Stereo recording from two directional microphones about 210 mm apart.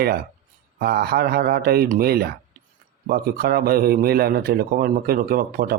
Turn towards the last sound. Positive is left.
turn(degrees=-45)  # may be behind; listen again after turning